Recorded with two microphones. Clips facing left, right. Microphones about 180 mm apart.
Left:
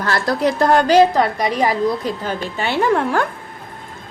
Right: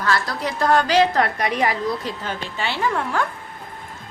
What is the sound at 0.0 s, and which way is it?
A woman's voice, 45° left (ahead or behind).